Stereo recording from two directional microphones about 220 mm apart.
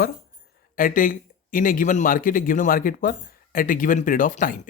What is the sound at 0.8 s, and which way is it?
Speech, 40° left (ahead or behind).